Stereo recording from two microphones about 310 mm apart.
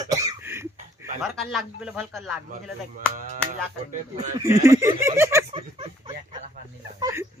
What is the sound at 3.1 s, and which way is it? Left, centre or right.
Music, right.